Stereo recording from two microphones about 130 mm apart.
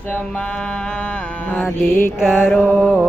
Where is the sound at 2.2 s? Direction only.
5° right (ahead or behind).